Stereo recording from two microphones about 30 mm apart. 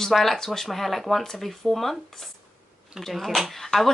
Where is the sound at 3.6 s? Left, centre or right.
Centre.